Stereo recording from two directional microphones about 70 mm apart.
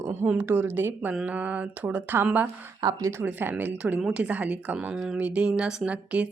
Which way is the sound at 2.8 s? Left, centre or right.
Right.